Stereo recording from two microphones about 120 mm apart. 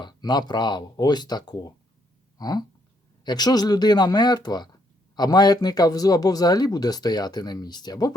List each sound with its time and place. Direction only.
0.0 s speech: 35° left (ahead or behind)